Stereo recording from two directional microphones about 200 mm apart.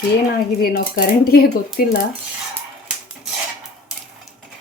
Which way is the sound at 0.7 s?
50° left (ahead or behind).